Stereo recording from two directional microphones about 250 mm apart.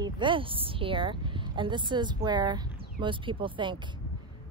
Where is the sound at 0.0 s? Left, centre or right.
Centre.